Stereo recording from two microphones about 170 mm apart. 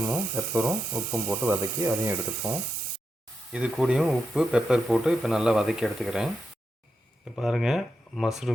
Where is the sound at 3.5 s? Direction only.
5° right (ahead or behind).